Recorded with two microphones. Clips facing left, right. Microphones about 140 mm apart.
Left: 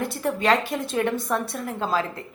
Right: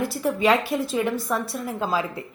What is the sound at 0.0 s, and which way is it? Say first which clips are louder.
A woman's voice: right 2 dB; 5° right (ahead or behind).